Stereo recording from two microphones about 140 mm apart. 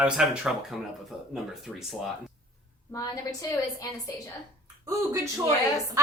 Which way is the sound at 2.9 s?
25° left (ahead or behind).